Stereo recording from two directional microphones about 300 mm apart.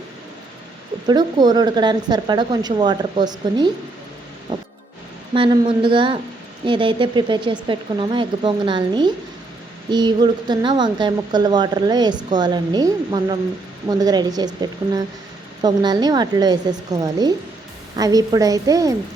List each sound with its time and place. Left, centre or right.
1.0 s a woman's voice: centre
4.5 s music: centre
5.3 s a woman's voice: centre